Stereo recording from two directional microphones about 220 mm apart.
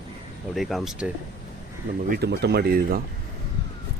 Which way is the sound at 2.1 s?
50° right (ahead or behind).